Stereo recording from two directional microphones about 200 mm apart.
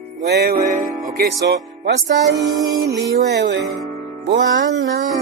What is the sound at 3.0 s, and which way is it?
Speech, 60° right (ahead or behind).